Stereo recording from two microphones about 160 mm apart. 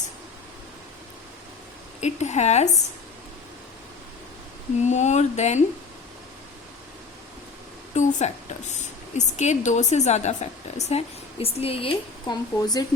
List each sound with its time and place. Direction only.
2.0 s a woman's voice: 45° left (ahead or behind)
4.9 s a woman's voice: 45° left (ahead or behind)
7.9 s a woman's voice: 45° left (ahead or behind); by 12.8 s 25° left (ahead or behind)